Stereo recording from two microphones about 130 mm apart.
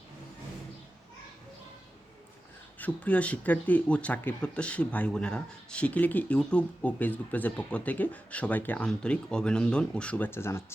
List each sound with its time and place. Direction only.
2.7 s speech: 10° left (ahead or behind)